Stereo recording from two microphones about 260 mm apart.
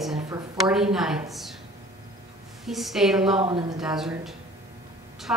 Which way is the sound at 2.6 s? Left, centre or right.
Centre.